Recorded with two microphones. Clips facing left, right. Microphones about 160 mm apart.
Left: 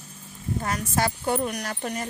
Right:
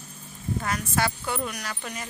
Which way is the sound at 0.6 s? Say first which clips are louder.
Left 2 dB; 40° left (ahead or behind).